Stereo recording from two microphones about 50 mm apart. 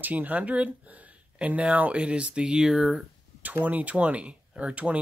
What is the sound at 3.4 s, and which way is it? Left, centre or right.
Speech, right.